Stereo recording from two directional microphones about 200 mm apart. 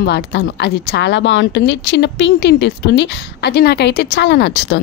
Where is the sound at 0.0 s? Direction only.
55° left (ahead or behind).